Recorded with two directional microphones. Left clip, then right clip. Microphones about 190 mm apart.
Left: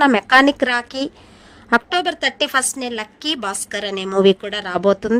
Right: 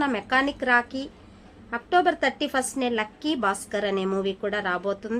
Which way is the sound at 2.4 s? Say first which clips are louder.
Left 7 dB; 50° left (ahead or behind).